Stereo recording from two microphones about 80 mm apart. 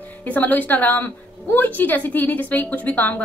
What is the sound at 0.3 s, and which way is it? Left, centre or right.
A woman's voice, left.